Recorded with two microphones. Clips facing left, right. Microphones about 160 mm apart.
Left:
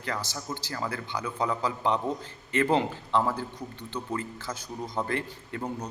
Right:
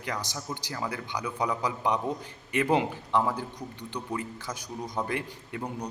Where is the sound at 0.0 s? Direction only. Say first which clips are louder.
Left 1 dB; 15° right (ahead or behind).